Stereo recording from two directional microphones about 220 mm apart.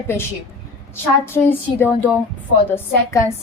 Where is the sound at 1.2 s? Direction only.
10° left (ahead or behind).